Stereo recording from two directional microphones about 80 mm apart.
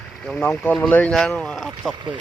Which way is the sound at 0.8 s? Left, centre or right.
Centre.